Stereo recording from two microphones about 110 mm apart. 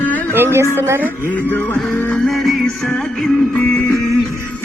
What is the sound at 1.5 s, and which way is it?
Music, 20° left (ahead or behind).